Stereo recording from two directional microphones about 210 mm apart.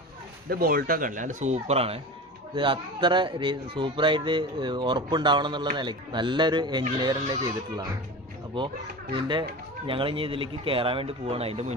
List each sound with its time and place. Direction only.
0.5 s speech: 45° right (ahead or behind); by 7.9 s 20° right (ahead or behind)
9.1 s speech: 20° right (ahead or behind)